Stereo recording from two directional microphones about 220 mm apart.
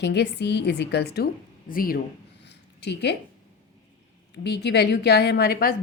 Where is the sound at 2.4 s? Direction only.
50° left (ahead or behind).